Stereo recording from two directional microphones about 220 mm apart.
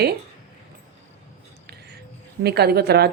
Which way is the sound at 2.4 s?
45° right (ahead or behind).